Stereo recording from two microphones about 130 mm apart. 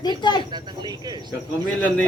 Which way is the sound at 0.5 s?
30° right (ahead or behind).